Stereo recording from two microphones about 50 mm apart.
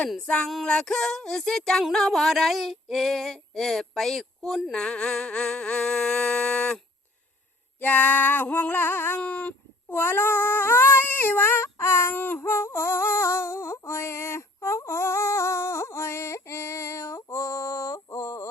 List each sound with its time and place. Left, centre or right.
0.2 s a sound: centre
1.9 s female singing: centre
4.7 s humming: centre
7.8 s female singing: left
9.1 s a sound: left
9.9 s cat: left
12.1 s cat: left
12.4 s music: left